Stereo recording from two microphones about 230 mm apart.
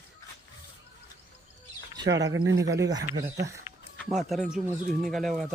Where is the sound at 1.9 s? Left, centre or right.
Centre.